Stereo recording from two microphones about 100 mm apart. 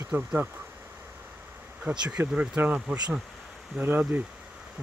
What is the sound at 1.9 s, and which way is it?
Speech, 15° right (ahead or behind).